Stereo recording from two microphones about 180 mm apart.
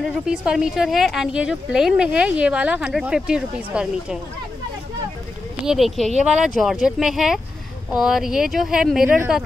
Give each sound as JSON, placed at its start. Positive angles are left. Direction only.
{"t": 0.0, "sound": "speech", "side_deg": -5}
{"t": 5.7, "sound": "speech", "side_deg": 0}